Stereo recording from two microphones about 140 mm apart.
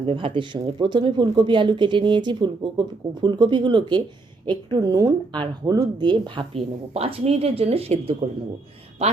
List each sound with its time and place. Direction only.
0.0 s a woman's voice: 40° right (ahead or behind)
6.5 s speech: 45° right (ahead or behind)